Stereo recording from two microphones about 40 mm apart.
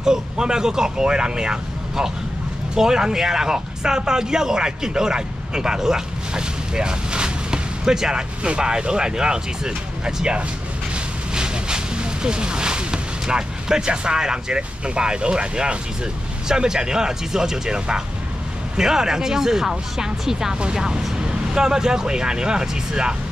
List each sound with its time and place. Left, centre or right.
0.0 s speech: centre